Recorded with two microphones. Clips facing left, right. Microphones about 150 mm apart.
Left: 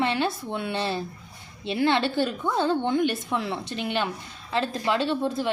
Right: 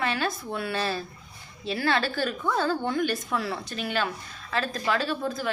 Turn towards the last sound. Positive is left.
turn(degrees=25)  # may be behind; listen again after turning